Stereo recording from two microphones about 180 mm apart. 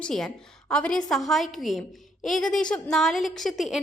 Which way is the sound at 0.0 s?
5° left (ahead or behind).